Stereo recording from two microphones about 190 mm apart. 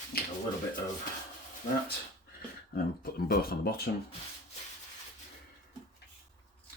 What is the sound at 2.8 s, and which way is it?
Speech, 50° left (ahead or behind).